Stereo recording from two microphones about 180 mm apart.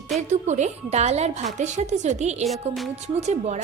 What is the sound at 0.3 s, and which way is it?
Speech, 40° right (ahead or behind).